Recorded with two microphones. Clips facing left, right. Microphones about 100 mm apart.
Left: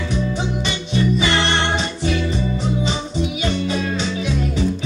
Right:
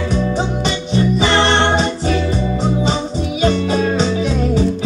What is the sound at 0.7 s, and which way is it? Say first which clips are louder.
Music: right 2 dB; 35° right (ahead or behind).